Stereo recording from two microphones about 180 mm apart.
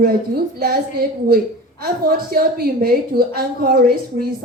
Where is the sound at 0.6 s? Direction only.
55° right (ahead or behind).